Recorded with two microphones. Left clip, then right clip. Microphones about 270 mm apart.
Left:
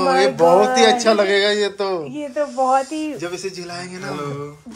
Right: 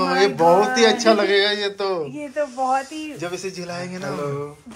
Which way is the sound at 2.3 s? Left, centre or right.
Left.